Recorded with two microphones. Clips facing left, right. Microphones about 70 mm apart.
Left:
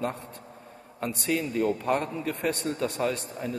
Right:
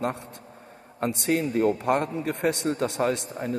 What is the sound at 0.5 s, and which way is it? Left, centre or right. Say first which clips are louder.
A man's voice: right 4 dB; right.